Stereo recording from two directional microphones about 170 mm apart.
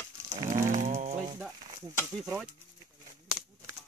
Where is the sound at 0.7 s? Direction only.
45° right (ahead or behind).